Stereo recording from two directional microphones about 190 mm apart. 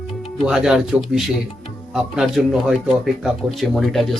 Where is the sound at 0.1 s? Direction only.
Centre (ahead or behind).